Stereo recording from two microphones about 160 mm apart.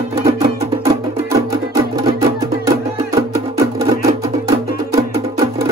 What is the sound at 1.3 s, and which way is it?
Music, 20° right (ahead or behind).